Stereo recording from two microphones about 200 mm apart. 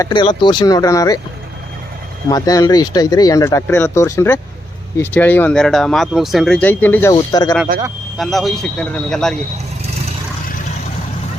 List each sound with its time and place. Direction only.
0.0 s speech: 25° left (ahead or behind)
2.3 s speech: 20° left (ahead or behind)
7.1 s speech: 20° left (ahead or behind)
8.2 s speech: centre (ahead or behind)